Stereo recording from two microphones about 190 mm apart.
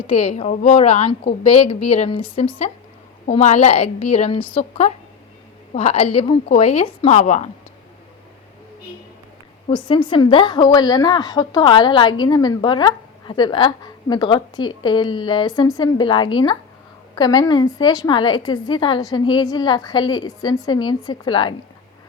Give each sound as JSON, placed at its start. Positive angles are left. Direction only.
{"t": 0.1, "sound": "a woman's voice", "side_deg": 35}
{"t": 9.6, "sound": "a woman's voice", "side_deg": 25}